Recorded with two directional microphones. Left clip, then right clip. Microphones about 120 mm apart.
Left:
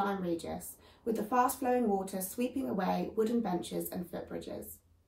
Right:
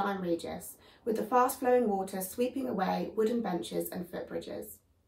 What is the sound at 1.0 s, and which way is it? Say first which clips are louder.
A woman's voice: right 2 dB; 25° right (ahead or behind).